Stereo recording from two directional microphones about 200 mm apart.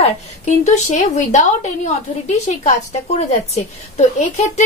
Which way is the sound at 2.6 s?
30° left (ahead or behind).